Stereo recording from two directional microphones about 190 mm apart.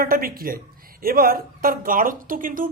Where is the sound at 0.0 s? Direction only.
50° right (ahead or behind).